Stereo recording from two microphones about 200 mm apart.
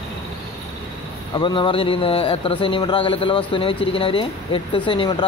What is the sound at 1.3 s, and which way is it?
Speech, 25° left (ahead or behind).